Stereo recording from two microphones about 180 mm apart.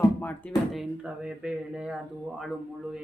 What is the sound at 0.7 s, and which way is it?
Speech, 5° right (ahead or behind).